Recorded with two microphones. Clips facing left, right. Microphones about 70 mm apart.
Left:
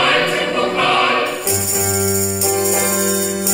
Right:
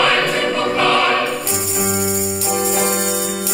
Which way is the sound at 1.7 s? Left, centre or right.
Left.